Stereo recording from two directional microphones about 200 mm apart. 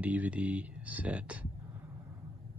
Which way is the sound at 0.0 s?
5° right (ahead or behind).